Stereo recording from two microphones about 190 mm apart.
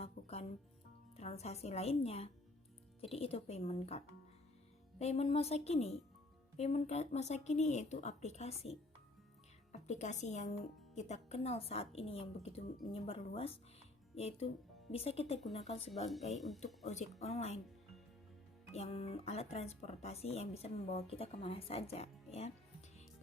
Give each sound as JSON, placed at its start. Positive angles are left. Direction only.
{"t": 0.0, "sound": "music", "side_deg": 35}
{"t": 1.1, "sound": "speech", "side_deg": 35}
{"t": 9.7, "sound": "speech", "side_deg": 35}
{"t": 16.3, "sound": "speech", "side_deg": 0}
{"t": 16.8, "sound": "speech", "side_deg": 35}
{"t": 18.7, "sound": "speech", "side_deg": 35}